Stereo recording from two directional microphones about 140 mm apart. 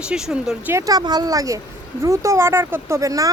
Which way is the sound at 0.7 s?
25° right (ahead or behind).